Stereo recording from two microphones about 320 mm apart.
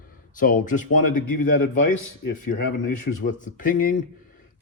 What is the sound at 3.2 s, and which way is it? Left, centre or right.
Speech, left.